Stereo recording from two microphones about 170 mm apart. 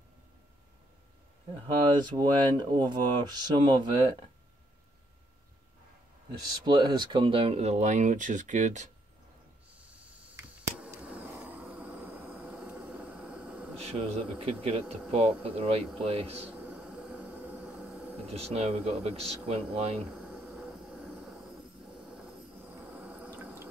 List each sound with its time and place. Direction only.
2.0 s speech: 25° right (ahead or behind)
6.4 s speech: 25° right (ahead or behind); by 8.9 s 45° right (ahead or behind)
9.8 s a sound: 10° right (ahead or behind)
11.0 s vehicle: 10° right (ahead or behind)
13.7 s speech: 35° right (ahead or behind)
16.4 s train: 10° right (ahead or behind)
18.1 s speech: 35° right (ahead or behind)
20.2 s train: 5° right (ahead or behind)
22.1 s drip: 5° right (ahead or behind)